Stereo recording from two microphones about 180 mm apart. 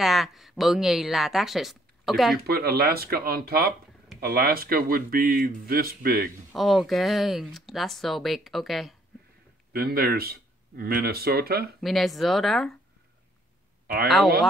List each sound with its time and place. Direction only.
0.0 s speech: centre (ahead or behind)
2.3 s speech: 60° right (ahead or behind)
6.5 s speech: centre (ahead or behind)
9.7 s speech: 55° right (ahead or behind)
11.8 s speech: centre (ahead or behind)
14.0 s speech: centre (ahead or behind)